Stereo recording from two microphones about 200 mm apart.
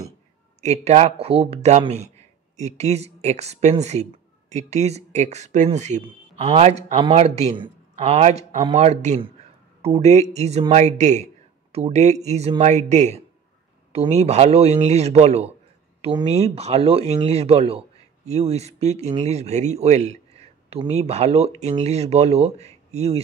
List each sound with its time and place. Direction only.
0.6 s speech: 35° right (ahead or behind)